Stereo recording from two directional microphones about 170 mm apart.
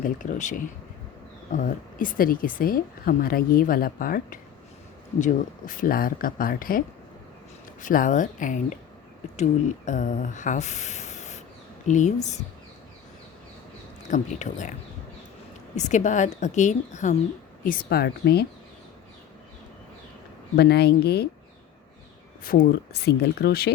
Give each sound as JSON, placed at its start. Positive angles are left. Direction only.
{"t": 0.0, "sound": "a woman's voice", "side_deg": 50}
{"t": 14.1, "sound": "a woman's voice", "side_deg": 45}
{"t": 20.6, "sound": "speech", "side_deg": 75}
{"t": 22.4, "sound": "speech", "side_deg": 65}